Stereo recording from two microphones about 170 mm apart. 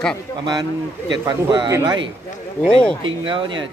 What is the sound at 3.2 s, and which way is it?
Speech, 30° right (ahead or behind).